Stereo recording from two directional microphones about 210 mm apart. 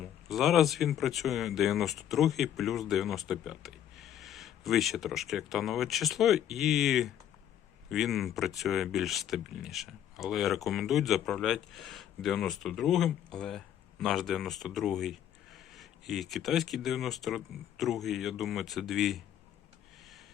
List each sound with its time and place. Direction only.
0.0 s speech: centre (ahead or behind)